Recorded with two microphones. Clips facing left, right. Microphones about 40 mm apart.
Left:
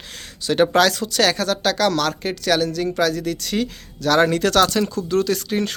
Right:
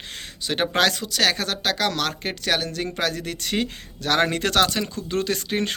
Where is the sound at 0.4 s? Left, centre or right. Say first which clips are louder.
Left 5 dB; centre.